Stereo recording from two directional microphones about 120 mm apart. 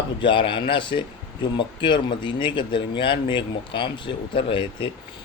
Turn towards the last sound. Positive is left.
turn(degrees=45)  # may be behind; listen again after turning